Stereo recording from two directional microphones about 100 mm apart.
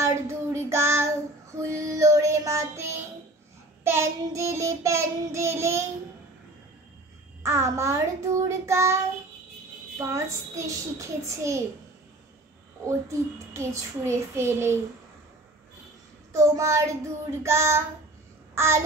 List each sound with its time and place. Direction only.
0.0 s child singing: 30° right (ahead or behind)
7.4 s child singing: 30° right (ahead or behind)
9.9 s a child's voice: 30° right (ahead or behind)
13.1 s child singing: 30° right (ahead or behind)
16.3 s a child's voice: 30° right (ahead or behind)
17.4 s child singing: 30° right (ahead or behind)
18.5 s babbling: 25° right (ahead or behind)